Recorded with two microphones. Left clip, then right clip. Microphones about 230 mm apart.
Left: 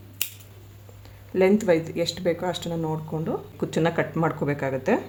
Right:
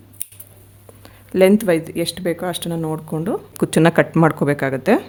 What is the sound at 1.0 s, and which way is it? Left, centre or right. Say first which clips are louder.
Speech: right 7 dB; right.